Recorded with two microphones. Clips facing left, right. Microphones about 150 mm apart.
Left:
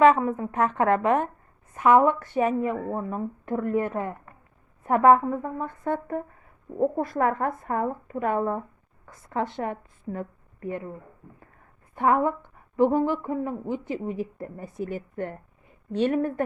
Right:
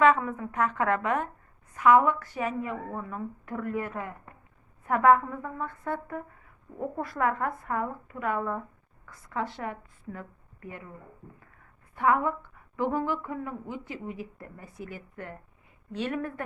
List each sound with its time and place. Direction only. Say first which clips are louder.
0.0 s a woman's voice: left 4 dB; 25° left (ahead or behind)
12.0 s a woman's voice: left 3 dB; 25° left (ahead or behind)